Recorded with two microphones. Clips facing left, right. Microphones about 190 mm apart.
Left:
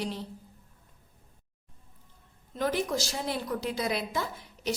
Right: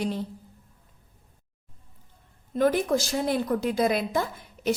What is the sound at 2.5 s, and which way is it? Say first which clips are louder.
A woman's voice: right 6 dB; 50° right (ahead or behind).